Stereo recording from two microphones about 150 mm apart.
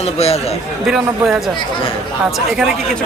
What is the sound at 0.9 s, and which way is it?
Speech, 5° right (ahead or behind).